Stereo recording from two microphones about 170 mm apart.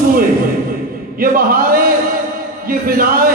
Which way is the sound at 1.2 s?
60° right (ahead or behind).